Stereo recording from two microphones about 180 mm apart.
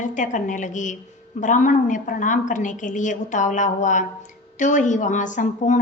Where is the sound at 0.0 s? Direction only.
45° left (ahead or behind).